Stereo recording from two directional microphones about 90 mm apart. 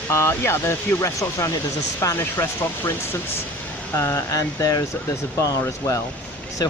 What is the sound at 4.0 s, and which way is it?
Speech, 30° left (ahead or behind).